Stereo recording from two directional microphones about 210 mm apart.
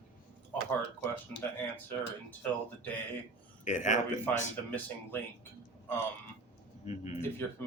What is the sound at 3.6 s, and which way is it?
Speech, 35° left (ahead or behind).